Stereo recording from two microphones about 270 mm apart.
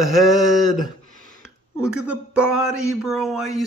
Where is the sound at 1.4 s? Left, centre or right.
Centre.